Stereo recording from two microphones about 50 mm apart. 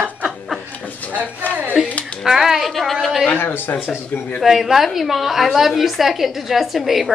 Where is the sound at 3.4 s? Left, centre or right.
Left.